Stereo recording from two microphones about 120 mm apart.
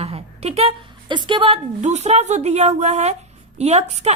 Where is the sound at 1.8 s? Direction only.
70° right (ahead or behind).